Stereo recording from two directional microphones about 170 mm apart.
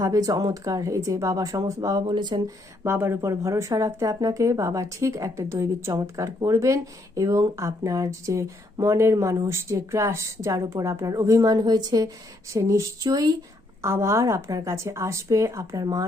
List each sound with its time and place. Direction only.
0.0 s speech: 20° right (ahead or behind)
2.8 s a woman's voice: 15° right (ahead or behind)